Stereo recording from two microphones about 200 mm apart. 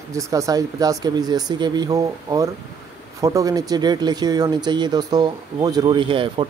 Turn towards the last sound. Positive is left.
turn(degrees=-25)  # may be behind; listen again after turning